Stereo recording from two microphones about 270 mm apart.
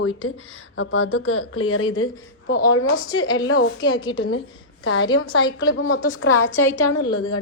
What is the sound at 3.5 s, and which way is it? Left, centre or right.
Speech, left.